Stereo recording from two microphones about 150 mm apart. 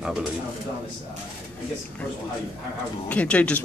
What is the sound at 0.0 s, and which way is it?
Speech, 5° right (ahead or behind).